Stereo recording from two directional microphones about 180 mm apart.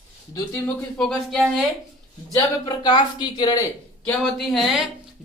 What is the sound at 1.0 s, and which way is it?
Speech, 5° left (ahead or behind).